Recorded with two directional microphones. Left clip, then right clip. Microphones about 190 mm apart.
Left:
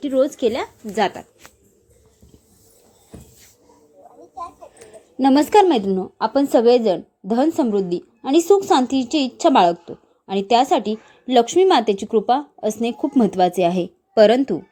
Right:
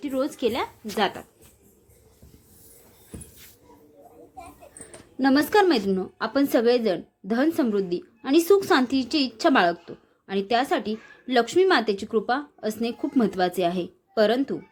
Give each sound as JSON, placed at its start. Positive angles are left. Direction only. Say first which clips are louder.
{"t": 0.0, "sound": "a woman's voice", "louder": "left 8 dB", "side_deg": 20}
{"t": 5.1, "sound": "a woman's voice", "louder": "left 6 dB", "side_deg": 20}